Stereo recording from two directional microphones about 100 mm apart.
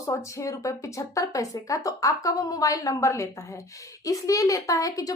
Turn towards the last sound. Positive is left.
turn(degrees=35)  # may be behind; listen again after turning